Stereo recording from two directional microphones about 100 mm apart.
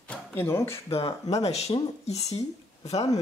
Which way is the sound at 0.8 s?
75° left (ahead or behind).